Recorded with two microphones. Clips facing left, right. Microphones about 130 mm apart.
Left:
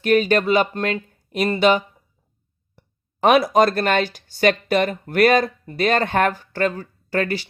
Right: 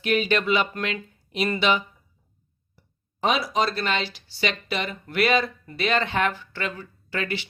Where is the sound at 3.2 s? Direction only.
60° left (ahead or behind).